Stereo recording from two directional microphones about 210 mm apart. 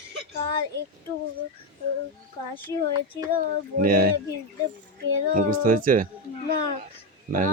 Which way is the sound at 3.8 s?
40° right (ahead or behind).